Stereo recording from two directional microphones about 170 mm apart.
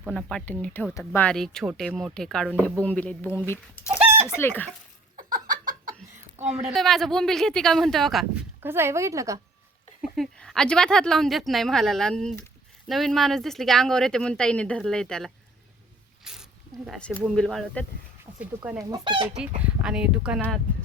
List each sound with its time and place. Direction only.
0.0 s speech: centre (ahead or behind)
6.7 s speech: centre (ahead or behind)
8.6 s speech: 15° right (ahead or behind)
10.0 s speech: centre (ahead or behind)
16.2 s zipper: 5° right (ahead or behind)
17.2 s speech: 5° left (ahead or behind)
18.3 s speech: 10° right (ahead or behind)
18.8 s chicken: 25° right (ahead or behind)
19.4 s speech: 5° right (ahead or behind)